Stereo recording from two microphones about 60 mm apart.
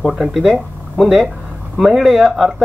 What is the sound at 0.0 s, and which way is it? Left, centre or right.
Speech, centre.